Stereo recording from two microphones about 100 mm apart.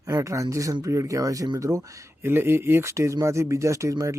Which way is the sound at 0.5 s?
30° right (ahead or behind).